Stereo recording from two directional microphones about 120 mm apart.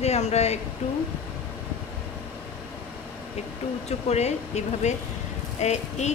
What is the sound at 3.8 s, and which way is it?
Speech, 65° left (ahead or behind).